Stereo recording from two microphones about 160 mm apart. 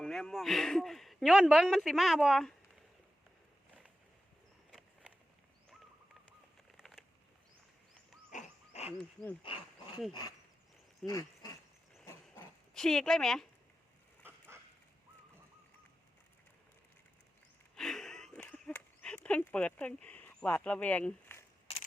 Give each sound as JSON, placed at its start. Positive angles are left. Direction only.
{"t": 0.0, "sound": "speech", "side_deg": 5}
{"t": 6.7, "sound": "bird", "side_deg": 0}
{"t": 8.3, "sound": "dog", "side_deg": 45}
{"t": 9.5, "sound": "speech", "side_deg": 30}
{"t": 11.0, "sound": "a sound", "side_deg": 20}
{"t": 12.7, "sound": "speech", "side_deg": 5}
{"t": 14.3, "sound": "dog", "side_deg": -15}
{"t": 17.7, "sound": "a sound", "side_deg": 0}
{"t": 21.7, "sound": "a sound", "side_deg": 40}